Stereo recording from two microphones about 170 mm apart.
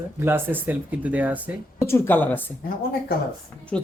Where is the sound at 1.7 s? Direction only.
15° left (ahead or behind).